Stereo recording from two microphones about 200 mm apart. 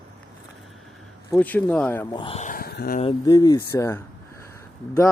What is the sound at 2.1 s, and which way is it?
Speech, 30° left (ahead or behind).